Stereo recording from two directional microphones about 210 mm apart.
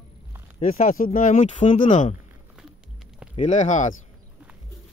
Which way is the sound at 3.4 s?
35° left (ahead or behind).